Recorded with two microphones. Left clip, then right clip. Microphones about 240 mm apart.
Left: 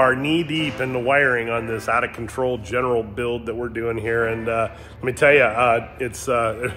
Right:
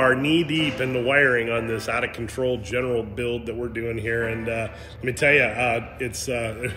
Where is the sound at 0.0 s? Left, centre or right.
Centre.